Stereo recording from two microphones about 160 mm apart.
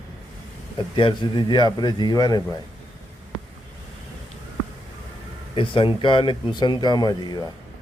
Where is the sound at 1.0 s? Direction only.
30° left (ahead or behind).